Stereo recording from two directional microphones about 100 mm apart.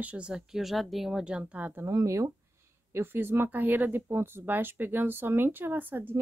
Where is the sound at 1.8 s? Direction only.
30° right (ahead or behind).